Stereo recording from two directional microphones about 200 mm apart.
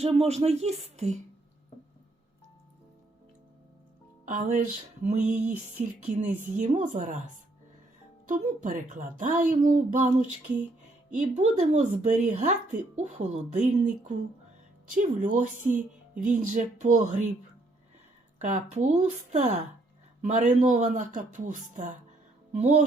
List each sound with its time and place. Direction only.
0.0 s speech: 30° right (ahead or behind)
4.3 s speech: 40° right (ahead or behind)
8.3 s speech: 40° right (ahead or behind)
18.3 s speech: 40° right (ahead or behind)